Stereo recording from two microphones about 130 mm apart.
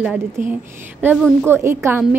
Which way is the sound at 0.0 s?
10° right (ahead or behind).